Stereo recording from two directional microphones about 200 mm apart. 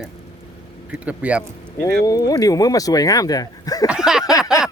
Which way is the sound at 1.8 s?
20° left (ahead or behind).